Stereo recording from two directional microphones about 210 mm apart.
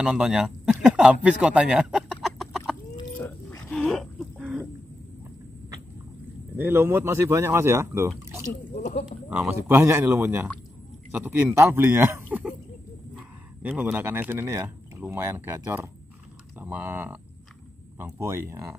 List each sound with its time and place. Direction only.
0.0 s a sound: 5° right (ahead or behind)
6.5 s speech: 10° right (ahead or behind)
8.7 s speech: 35° left (ahead or behind)
9.3 s speech: 5° right (ahead or behind)